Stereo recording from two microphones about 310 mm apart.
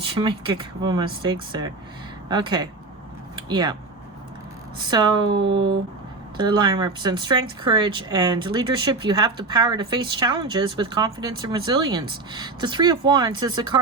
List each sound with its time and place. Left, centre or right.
0.0 s speech: centre
4.9 s speech: centre